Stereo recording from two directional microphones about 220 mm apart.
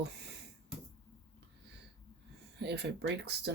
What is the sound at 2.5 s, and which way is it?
Speech, 50° right (ahead or behind).